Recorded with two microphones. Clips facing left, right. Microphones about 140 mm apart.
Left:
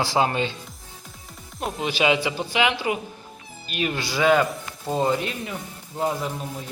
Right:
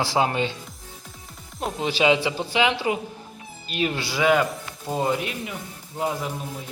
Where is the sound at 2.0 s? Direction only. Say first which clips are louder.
Right 1 dB; 25° right (ahead or behind).